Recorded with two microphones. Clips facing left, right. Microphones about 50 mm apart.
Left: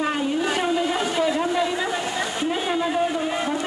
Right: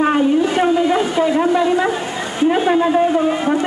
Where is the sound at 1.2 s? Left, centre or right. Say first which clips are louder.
Right 6 dB; right; by 3.4 s centre.